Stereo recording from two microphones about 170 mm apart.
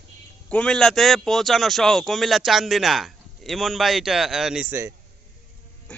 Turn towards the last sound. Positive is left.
turn(degrees=-10)  # may be behind; listen again after turning